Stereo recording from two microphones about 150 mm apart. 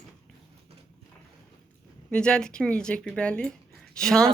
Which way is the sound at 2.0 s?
5° left (ahead or behind).